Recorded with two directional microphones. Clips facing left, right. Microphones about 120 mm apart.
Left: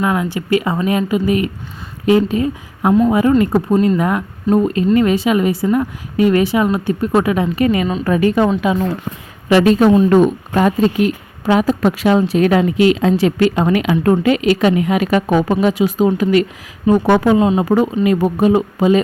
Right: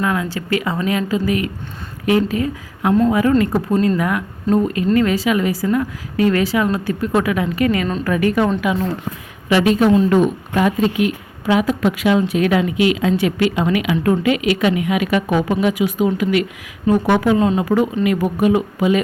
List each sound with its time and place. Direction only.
0.0 s a woman's voice: 20° left (ahead or behind)
9.5 s a woman's voice: 40° left (ahead or behind)